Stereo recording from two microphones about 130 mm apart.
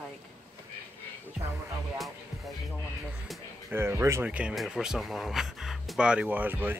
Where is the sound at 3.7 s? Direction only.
20° right (ahead or behind).